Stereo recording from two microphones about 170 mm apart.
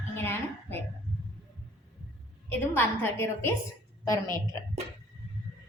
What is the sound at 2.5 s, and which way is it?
A woman's voice, 10° left (ahead or behind).